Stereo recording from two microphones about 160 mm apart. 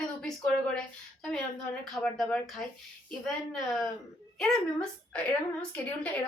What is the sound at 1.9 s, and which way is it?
A woman's voice, 5° left (ahead or behind).